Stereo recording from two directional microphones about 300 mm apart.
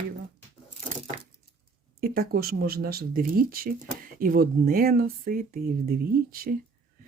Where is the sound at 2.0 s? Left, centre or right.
Right.